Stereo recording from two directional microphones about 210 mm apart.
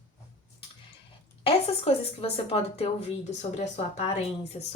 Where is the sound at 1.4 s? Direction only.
25° left (ahead or behind).